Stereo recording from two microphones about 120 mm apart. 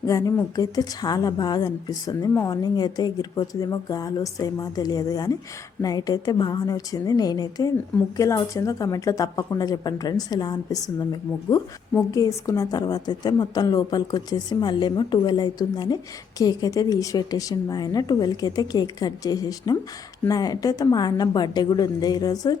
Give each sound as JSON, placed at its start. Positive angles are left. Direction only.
{"t": 0.0, "sound": "a woman's voice", "side_deg": 30}